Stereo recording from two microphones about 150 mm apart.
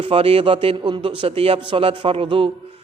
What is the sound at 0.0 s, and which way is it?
Speech, 40° right (ahead or behind).